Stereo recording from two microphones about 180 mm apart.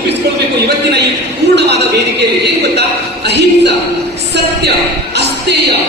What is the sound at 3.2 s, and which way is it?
Speech, 70° right (ahead or behind).